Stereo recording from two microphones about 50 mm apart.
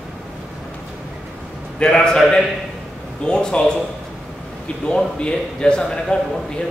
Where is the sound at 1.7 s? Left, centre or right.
Centre.